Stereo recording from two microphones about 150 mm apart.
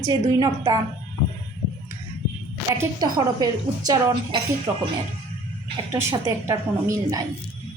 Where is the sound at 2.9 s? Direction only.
25° right (ahead or behind).